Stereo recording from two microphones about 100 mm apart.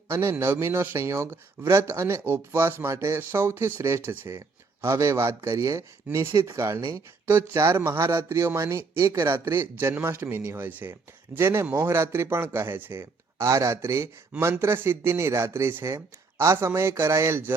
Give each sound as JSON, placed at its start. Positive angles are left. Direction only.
{"t": 0.1, "sound": "speech", "side_deg": -30}
{"t": 4.4, "sound": "speech", "side_deg": -30}